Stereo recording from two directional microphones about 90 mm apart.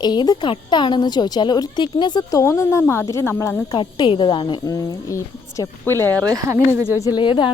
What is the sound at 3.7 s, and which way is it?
Speech, 60° left (ahead or behind).